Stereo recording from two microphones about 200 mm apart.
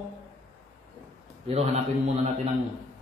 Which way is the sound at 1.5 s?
30° right (ahead or behind).